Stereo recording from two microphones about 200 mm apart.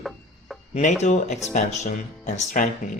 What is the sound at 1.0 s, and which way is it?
Speech, 35° left (ahead or behind).